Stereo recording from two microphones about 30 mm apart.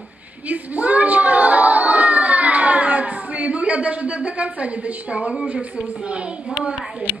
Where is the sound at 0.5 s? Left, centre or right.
Right.